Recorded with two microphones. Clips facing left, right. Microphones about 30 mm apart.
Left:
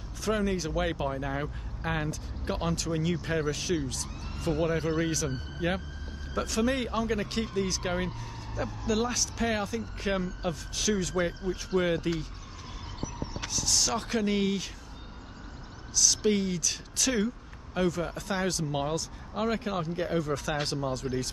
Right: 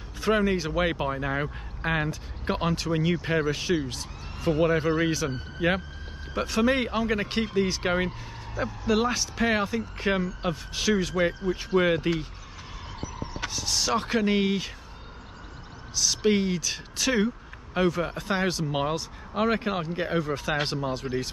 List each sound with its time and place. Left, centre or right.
0.2 s speech: right
13.4 s speech: right
15.9 s speech: right